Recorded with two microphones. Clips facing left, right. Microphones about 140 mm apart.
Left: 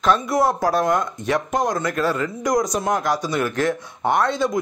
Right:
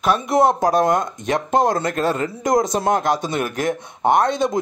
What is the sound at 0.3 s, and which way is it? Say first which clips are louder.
Speech: right 3 dB; 20° right (ahead or behind).